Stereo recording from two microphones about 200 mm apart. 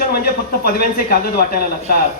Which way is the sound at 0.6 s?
50° left (ahead or behind).